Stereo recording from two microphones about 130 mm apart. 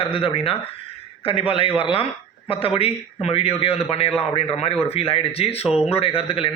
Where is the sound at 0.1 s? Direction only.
45° left (ahead or behind).